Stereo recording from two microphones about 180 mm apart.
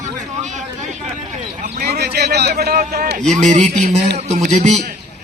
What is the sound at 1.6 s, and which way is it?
A man's voice, 60° right (ahead or behind).